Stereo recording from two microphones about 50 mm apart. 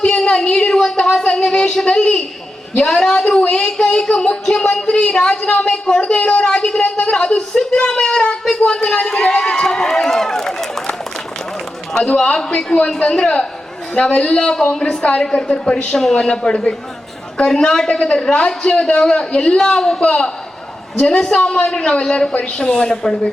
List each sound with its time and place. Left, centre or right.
0.0 s a woman's voice: centre
9.2 s run: centre
9.6 s run: centre
11.9 s a woman's voice: centre